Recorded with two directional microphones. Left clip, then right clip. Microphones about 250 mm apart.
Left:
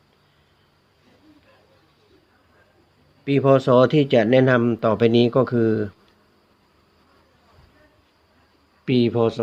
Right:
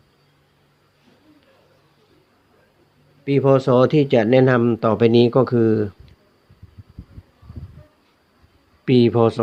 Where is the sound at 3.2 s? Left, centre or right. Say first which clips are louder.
Right 1 dB; centre.